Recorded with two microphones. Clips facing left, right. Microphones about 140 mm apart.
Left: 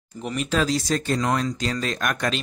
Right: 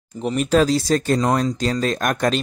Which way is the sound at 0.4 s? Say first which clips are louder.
Right 6 dB; 40° right (ahead or behind).